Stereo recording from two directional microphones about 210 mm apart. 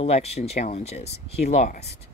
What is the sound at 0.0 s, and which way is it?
Speech, 30° left (ahead or behind).